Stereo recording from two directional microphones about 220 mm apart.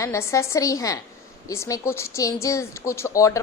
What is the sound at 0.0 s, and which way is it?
A woman's voice, 15° left (ahead or behind).